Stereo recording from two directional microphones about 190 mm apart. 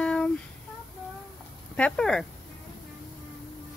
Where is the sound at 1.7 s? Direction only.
5° left (ahead or behind).